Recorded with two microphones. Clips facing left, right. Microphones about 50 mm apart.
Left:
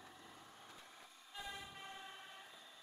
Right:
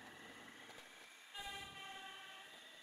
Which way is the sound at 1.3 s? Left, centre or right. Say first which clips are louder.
Left 1 dB; centre.